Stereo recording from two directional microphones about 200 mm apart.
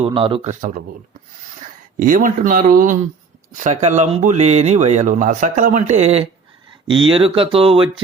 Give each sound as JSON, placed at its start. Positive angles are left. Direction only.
{"t": 0.0, "sound": "speech", "side_deg": -25}
{"t": 2.0, "sound": "speech", "side_deg": -45}